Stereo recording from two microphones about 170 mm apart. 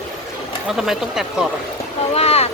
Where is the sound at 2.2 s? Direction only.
35° left (ahead or behind).